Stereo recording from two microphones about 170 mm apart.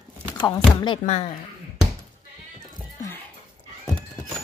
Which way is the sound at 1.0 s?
40° left (ahead or behind).